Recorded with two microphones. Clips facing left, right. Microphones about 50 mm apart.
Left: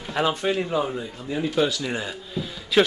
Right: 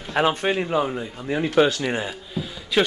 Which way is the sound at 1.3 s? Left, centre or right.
Right.